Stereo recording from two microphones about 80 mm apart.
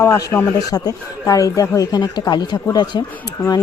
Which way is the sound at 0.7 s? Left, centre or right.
Left.